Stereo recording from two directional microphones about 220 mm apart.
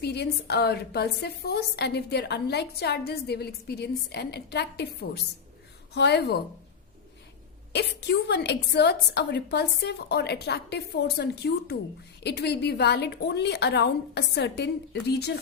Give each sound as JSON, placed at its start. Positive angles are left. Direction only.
{"t": 0.0, "sound": "a woman's voice", "side_deg": 45}
{"t": 7.7, "sound": "a woman's voice", "side_deg": 50}